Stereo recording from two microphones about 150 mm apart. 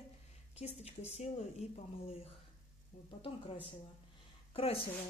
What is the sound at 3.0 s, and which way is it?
Speech, 35° left (ahead or behind).